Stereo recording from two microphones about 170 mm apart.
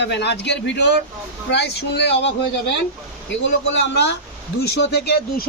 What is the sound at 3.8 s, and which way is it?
Speech, 90° left.